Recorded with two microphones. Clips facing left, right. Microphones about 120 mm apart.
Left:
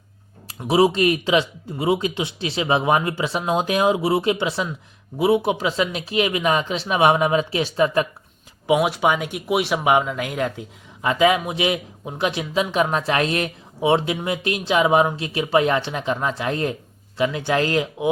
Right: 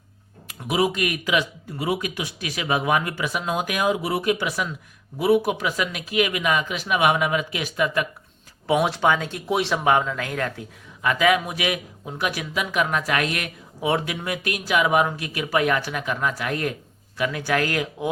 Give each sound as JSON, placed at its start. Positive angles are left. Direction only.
{"t": 0.6, "sound": "speech", "side_deg": 30}
{"t": 8.6, "sound": "speech", "side_deg": 10}